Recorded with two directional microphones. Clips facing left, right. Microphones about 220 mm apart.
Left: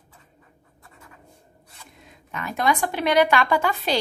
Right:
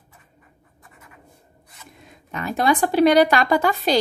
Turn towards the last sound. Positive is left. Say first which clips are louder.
# right 4 dB
turn(degrees=-40)  # may be behind; listen again after turning